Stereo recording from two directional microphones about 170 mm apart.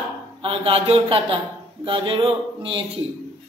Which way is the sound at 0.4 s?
35° right (ahead or behind).